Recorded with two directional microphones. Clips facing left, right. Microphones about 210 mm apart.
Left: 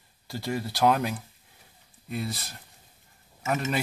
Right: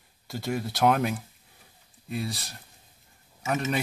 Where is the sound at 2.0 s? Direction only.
Centre (ahead or behind).